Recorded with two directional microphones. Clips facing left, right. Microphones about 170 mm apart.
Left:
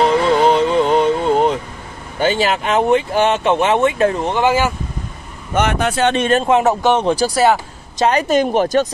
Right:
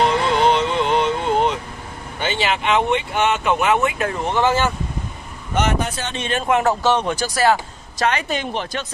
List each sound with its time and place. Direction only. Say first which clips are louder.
0.2 s music: left 4 dB; 40° left (ahead or behind)
2.1 s speech: left 6 dB; 40° left (ahead or behind)
4.3 s speech: left 3 dB; 10° left (ahead or behind)
5.5 s speech: left 4 dB; 60° left (ahead or behind)
6.4 s speech: left 4 dB; 20° left (ahead or behind)
7.0 s speech: left 6 dB; 30° left (ahead or behind)
8.0 s speech: left 7 dB; 35° left (ahead or behind)